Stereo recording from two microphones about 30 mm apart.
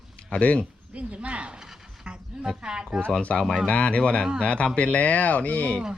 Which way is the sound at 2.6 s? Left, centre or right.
Right.